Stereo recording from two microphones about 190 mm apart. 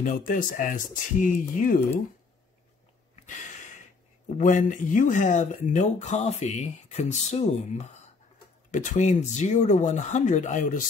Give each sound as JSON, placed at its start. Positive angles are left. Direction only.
{"t": 0.0, "sound": "speech", "side_deg": 45}
{"t": 3.3, "sound": "a sound", "side_deg": 40}
{"t": 4.4, "sound": "speech", "side_deg": 40}